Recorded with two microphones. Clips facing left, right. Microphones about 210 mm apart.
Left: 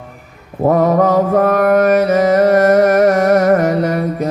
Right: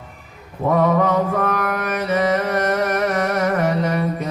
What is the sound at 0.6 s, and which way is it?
Mantra, 45° left (ahead or behind).